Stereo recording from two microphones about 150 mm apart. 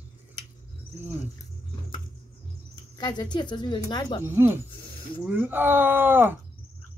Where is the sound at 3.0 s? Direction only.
30° left (ahead or behind).